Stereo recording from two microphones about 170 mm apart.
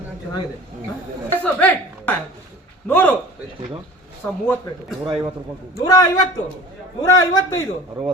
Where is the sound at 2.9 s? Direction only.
10° left (ahead or behind).